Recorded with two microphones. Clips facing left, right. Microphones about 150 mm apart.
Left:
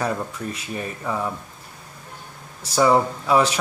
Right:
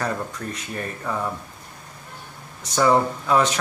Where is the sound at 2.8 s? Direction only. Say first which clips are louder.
Left 1 dB; 10° left (ahead or behind).